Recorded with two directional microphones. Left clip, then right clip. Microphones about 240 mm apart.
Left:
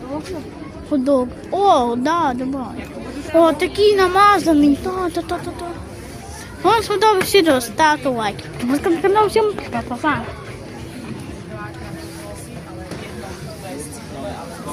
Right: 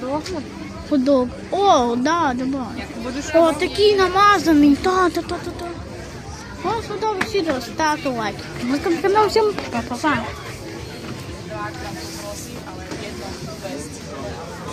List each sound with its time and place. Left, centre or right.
1.0 s a woman's voice: centre
4.8 s speech: centre
6.7 s speech: left
7.8 s a woman's voice: centre